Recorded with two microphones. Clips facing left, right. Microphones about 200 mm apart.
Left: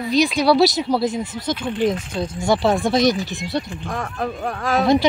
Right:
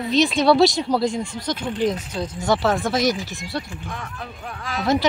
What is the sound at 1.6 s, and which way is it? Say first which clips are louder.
Speech: left 2 dB; 20° left (ahead or behind).